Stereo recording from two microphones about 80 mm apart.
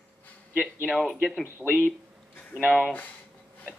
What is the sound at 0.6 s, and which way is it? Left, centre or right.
Speech, centre.